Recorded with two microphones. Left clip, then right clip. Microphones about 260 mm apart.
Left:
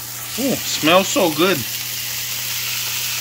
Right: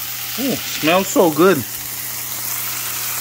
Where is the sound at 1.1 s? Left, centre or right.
Right.